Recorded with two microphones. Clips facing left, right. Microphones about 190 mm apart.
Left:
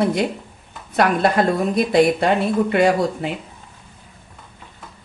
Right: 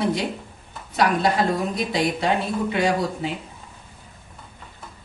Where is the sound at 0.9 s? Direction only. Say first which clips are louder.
Left 3 dB; 55° left (ahead or behind).